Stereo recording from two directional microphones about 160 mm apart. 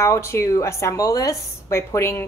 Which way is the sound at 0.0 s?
15° left (ahead or behind).